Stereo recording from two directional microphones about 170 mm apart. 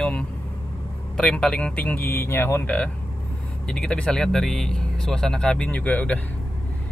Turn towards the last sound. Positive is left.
turn(degrees=10)  # may be behind; listen again after turning